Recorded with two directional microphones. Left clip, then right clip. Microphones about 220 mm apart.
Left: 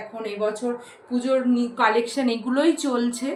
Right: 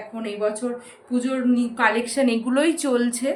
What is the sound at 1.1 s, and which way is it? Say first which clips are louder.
A woman's voice: left 1 dB; 35° right (ahead or behind).